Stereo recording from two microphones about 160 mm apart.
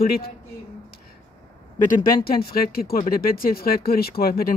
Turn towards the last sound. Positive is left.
turn(degrees=70)  # may be behind; listen again after turning